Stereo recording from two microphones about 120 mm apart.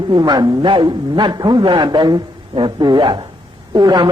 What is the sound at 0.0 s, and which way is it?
A man's voice, 40° right (ahead or behind).